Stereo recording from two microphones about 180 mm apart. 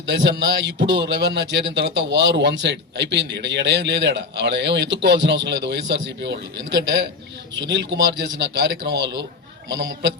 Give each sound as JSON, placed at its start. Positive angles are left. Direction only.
{"t": 0.1, "sound": "a man's voice", "side_deg": -75}